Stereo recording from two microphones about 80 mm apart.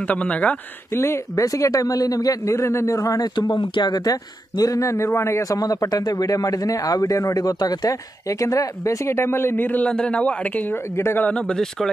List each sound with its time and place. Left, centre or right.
0.0 s speech: centre
0.9 s speech: left
3.3 s speech: left; by 10.8 s centre
11.0 s speech: left
11.2 s speech: centre